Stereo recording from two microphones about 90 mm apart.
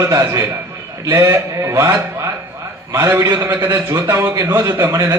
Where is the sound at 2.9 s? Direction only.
30° right (ahead or behind).